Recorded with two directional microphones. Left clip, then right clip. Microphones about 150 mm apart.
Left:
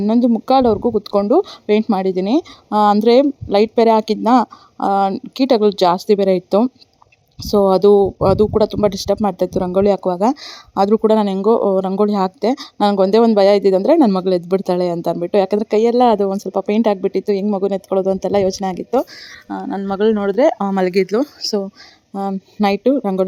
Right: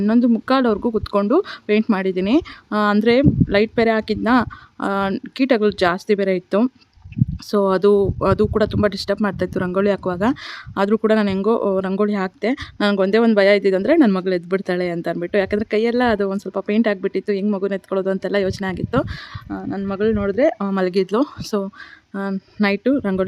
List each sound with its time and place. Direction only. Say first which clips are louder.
0.4 s speech: left 8 dB; 5° left (ahead or behind)
0.8 s speech: left 4 dB; 25° right (ahead or behind)
1.1 s speech: left 3 dB; centre (ahead or behind)
7.7 s speech: left 4 dB; 5° left (ahead or behind)